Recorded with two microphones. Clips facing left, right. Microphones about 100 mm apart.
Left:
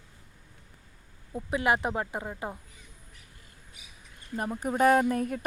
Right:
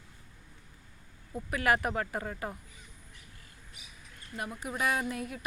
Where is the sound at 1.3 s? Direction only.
20° left (ahead or behind).